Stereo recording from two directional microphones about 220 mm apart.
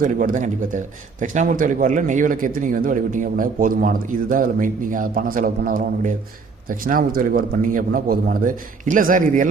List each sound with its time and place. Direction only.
0.0 s a man's voice: 35° right (ahead or behind)